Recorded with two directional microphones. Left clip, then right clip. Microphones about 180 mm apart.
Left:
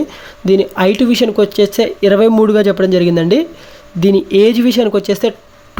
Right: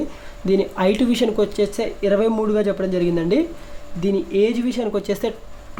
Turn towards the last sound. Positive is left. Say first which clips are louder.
# left 9 dB
turn(degrees=30)  # may be behind; listen again after turning